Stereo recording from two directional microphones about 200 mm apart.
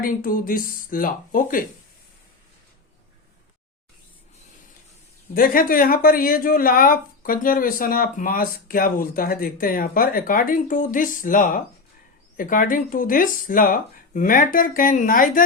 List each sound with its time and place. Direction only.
0.0 s a woman's voice: 45° left (ahead or behind)
5.3 s a woman's voice: 45° left (ahead or behind)